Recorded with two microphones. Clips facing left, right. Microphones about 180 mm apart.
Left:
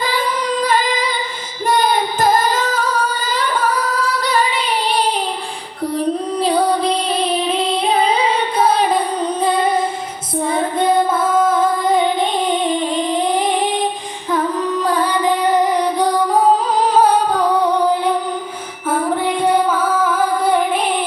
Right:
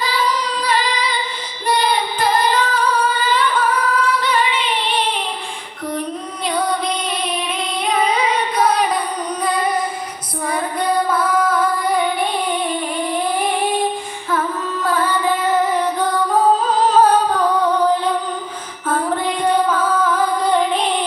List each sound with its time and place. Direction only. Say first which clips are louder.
0.0 s female singing: left 1 dB; 50° left (ahead or behind)
1.6 s singing: left 2 dB; 45° left (ahead or behind)
6.4 s female singing: left 4 dB; 30° left (ahead or behind)
14.3 s music: left 4 dB; 15° left (ahead or behind)